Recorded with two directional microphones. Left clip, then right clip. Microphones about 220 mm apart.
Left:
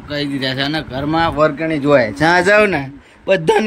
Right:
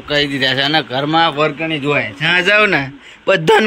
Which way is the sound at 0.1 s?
10° left (ahead or behind).